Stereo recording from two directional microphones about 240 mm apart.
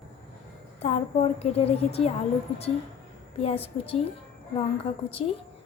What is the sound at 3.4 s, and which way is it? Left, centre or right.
Speech, left.